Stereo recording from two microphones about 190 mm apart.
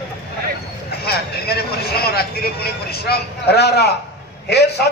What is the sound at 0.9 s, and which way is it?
Speech, 55° left (ahead or behind).